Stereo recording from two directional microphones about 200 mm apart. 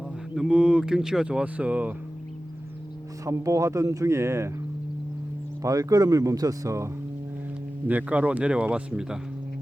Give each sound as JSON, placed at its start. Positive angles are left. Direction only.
{"t": 0.3, "sound": "speech", "side_deg": -5}
{"t": 3.2, "sound": "speech", "side_deg": -15}
{"t": 5.6, "sound": "speech", "side_deg": -15}